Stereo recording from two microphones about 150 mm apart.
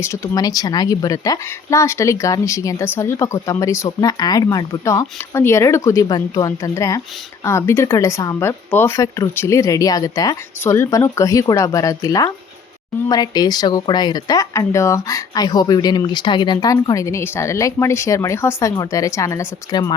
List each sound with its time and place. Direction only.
0.0 s speech: 20° left (ahead or behind)